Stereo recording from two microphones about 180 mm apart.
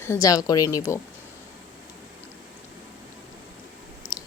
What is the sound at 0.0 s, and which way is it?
Speech, 15° left (ahead or behind).